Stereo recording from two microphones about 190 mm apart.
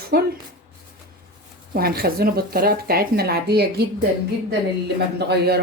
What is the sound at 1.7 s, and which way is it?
Speech, 55° right (ahead or behind).